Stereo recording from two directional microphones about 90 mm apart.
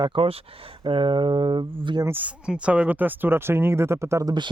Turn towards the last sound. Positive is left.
turn(degrees=-35)  # may be behind; listen again after turning